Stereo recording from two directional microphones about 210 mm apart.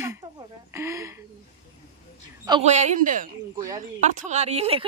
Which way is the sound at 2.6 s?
35° right (ahead or behind).